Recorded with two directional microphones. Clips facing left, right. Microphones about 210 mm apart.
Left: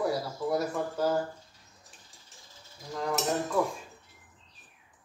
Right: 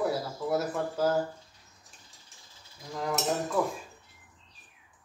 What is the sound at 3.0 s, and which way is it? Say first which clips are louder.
Speech: even; centre (ahead or behind).